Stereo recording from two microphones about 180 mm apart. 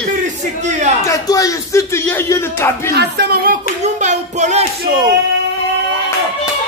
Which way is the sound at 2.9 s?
65° right (ahead or behind).